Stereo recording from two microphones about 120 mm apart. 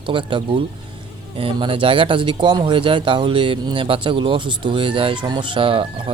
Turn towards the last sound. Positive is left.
turn(degrees=-45)  # may be behind; listen again after turning